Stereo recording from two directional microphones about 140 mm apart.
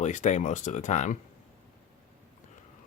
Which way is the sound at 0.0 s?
60° left (ahead or behind).